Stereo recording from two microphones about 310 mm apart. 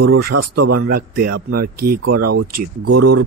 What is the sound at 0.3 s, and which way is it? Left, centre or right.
Speech, right.